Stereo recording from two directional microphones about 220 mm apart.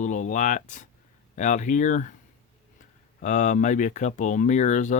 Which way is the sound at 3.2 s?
35° left (ahead or behind).